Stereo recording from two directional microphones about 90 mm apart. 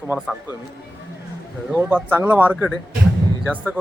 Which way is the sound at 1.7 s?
20° right (ahead or behind).